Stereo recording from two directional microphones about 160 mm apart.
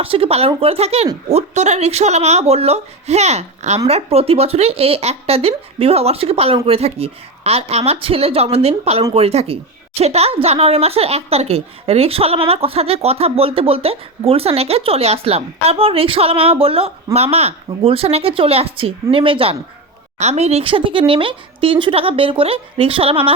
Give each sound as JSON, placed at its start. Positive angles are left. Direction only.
{"t": 0.0, "sound": "a woman's voice", "side_deg": -35}